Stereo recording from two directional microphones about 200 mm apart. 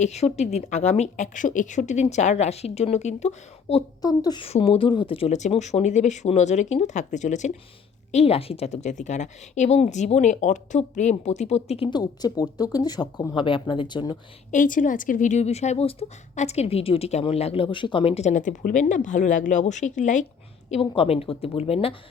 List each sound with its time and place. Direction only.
0.0 s a woman's voice: 35° left (ahead or behind)
4.0 s a woman's voice: 20° left (ahead or behind)
14.5 s a woman's voice: 40° left (ahead or behind)